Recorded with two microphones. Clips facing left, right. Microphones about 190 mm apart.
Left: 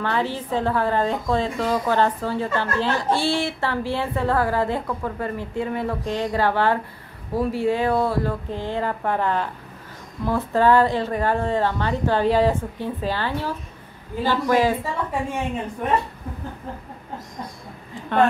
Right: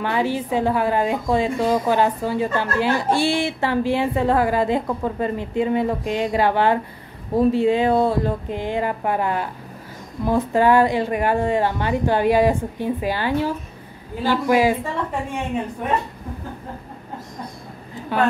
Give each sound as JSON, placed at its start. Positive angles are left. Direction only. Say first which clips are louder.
{"t": 0.0, "sound": "a woman's voice", "louder": "right 3 dB", "side_deg": -15}